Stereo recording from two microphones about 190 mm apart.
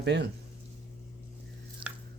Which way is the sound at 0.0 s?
60° right (ahead or behind).